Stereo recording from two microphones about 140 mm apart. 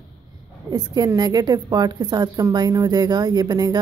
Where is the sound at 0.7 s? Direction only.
30° right (ahead or behind).